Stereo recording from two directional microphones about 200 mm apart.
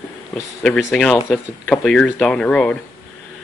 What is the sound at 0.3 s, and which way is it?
Speech, 5° left (ahead or behind).